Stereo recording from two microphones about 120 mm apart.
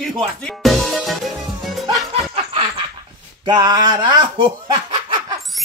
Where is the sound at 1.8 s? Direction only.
55° right (ahead or behind).